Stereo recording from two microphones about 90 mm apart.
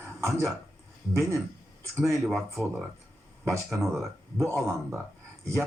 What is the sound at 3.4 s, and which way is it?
Speech, 30° right (ahead or behind).